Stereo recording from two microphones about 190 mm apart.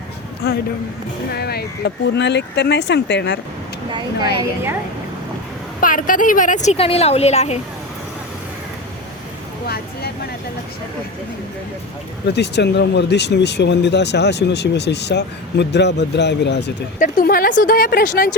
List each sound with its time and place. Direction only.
0.4 s speech: 55° left (ahead or behind)
5.8 s a woman's voice: 45° left (ahead or behind)
9.6 s vehicle: 55° left (ahead or behind)
12.3 s speech: 60° left (ahead or behind)
17.0 s speech: 50° left (ahead or behind)